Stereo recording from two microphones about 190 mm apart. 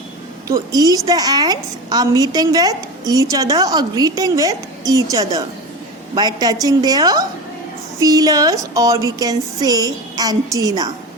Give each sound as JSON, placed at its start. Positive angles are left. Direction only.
{"t": 0.4, "sound": "a woman's voice", "side_deg": -20}